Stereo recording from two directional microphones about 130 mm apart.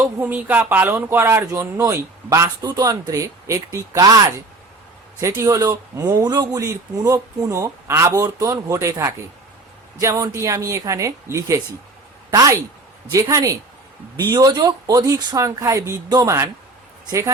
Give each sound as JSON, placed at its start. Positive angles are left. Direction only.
{"t": 0.0, "sound": "speech", "side_deg": -15}
{"t": 5.2, "sound": "speech", "side_deg": -25}